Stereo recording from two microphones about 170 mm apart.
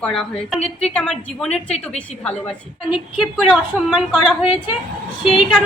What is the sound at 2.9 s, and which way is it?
A woman's voice, centre (ahead or behind).